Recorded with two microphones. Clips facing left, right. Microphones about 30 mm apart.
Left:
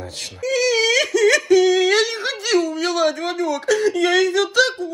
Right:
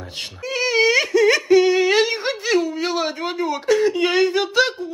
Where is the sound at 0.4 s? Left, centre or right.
Right.